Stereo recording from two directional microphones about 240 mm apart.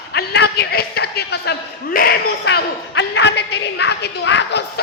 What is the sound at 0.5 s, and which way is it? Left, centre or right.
A man's voice, left.